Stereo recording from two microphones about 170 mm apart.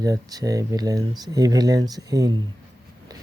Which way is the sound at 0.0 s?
20° right (ahead or behind).